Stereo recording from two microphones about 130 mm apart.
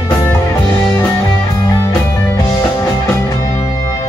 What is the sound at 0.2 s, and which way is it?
Music, 25° left (ahead or behind).